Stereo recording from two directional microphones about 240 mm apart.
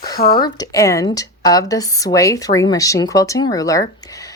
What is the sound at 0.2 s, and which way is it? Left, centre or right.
Speech, left.